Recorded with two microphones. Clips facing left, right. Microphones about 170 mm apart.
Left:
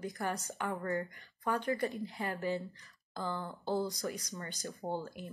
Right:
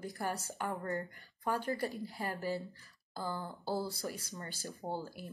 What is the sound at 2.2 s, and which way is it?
Speech, 40° right (ahead or behind).